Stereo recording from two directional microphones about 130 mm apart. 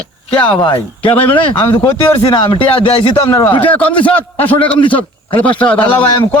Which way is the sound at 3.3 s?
25° left (ahead or behind).